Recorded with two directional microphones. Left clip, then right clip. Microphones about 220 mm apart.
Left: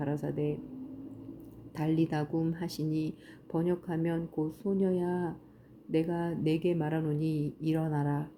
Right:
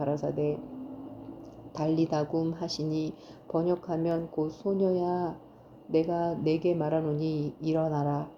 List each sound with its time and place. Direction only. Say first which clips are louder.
0.3 s speech: right 3 dB; 35° left (ahead or behind)
1.7 s speech: right 3 dB; 35° left (ahead or behind)